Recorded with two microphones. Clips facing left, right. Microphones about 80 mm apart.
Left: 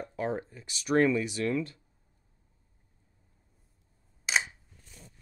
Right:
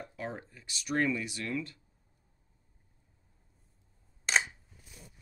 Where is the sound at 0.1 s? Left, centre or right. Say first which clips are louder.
Left 8 dB; left.